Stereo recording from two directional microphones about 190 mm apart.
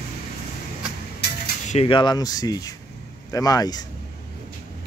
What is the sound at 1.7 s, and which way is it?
Speech, 30° left (ahead or behind).